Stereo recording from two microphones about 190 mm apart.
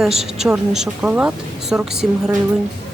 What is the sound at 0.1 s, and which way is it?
Speech, 35° right (ahead or behind).